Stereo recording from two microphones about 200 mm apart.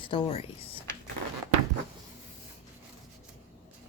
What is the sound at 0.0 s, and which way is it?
Speech, 25° left (ahead or behind).